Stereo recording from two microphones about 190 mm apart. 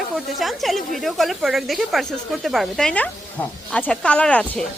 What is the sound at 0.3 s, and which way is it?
Speech, centre (ahead or behind).